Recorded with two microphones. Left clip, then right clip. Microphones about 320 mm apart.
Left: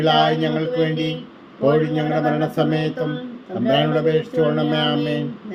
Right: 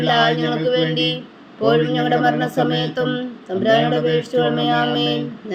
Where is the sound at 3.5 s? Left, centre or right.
Right.